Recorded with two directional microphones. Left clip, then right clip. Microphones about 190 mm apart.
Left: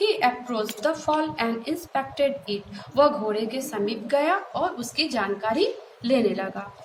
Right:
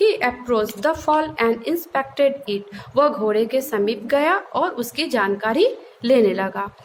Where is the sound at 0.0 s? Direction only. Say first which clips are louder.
Right 4 dB; 50° right (ahead or behind).